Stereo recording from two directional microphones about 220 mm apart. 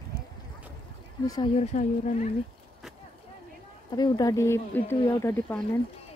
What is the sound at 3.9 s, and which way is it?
A woman's voice, 15° left (ahead or behind).